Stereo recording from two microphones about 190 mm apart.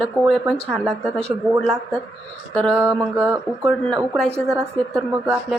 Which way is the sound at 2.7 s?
10° right (ahead or behind).